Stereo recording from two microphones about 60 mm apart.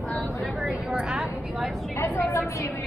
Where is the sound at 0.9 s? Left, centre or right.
Centre.